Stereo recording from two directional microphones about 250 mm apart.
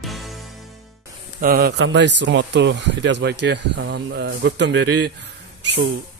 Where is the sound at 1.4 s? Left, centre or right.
Right.